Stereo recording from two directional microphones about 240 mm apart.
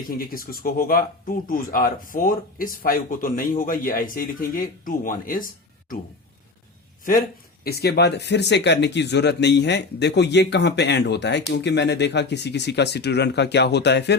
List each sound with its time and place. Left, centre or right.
0.1 s speech: left
7.6 s speech: left